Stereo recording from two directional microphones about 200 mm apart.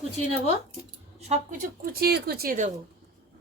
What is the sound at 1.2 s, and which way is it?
Speech, 35° right (ahead or behind).